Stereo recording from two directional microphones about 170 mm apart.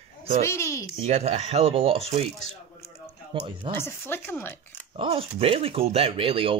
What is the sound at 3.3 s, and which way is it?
Speech, 25° right (ahead or behind).